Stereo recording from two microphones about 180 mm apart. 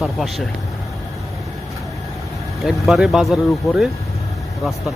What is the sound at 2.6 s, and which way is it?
Speech, centre (ahead or behind).